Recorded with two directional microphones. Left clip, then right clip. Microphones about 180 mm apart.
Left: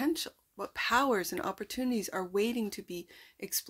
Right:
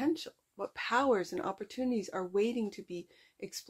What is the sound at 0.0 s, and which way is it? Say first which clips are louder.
Speech: left 1 dB; 20° left (ahead or behind).